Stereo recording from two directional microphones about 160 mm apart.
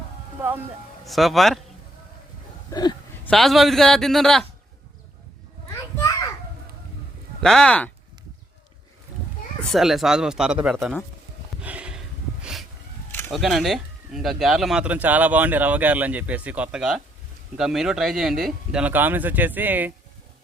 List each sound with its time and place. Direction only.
1.0 s a man's voice: centre (ahead or behind)
2.6 s hiccup: 25° left (ahead or behind)
3.2 s a man's voice: centre (ahead or behind)
6.0 s children playing: 20° left (ahead or behind)
7.4 s a man's voice: 5° left (ahead or behind)
9.7 s a man's voice: centre (ahead or behind)
11.6 s a sound: 10° right (ahead or behind)
13.1 s a sound: 15° left (ahead or behind)
13.3 s speech: centre (ahead or behind)